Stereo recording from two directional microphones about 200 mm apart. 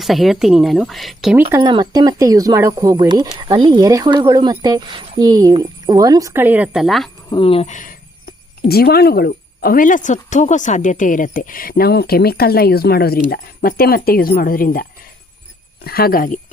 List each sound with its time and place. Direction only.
0.0 s speech: centre (ahead or behind)
1.6 s speech: 20° right (ahead or behind); by 7.1 s centre (ahead or behind)
7.3 s speech: 25° left (ahead or behind)
8.6 s a woman's voice: 50° left (ahead or behind)